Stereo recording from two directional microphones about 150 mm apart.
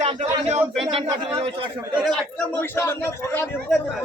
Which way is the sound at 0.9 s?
40° right (ahead or behind).